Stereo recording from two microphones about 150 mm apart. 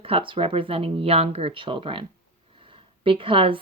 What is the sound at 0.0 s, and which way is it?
A woman's voice, 35° right (ahead or behind).